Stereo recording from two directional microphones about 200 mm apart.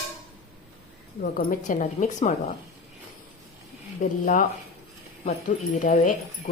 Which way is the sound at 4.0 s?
40° left (ahead or behind).